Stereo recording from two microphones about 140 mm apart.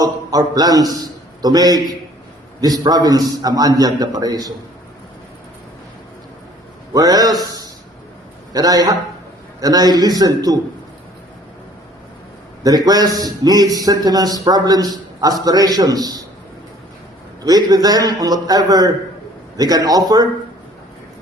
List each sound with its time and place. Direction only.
0.0 s a man's voice: 25° right (ahead or behind)
6.9 s a man's voice: 25° right (ahead or behind)
12.6 s a man's voice: 25° right (ahead or behind)
17.4 s a man's voice: 25° right (ahead or behind)